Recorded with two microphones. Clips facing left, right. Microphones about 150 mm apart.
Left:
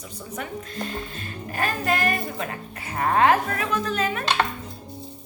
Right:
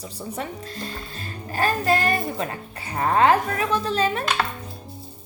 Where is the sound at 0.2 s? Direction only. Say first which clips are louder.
Right 1 dB; 30° right (ahead or behind).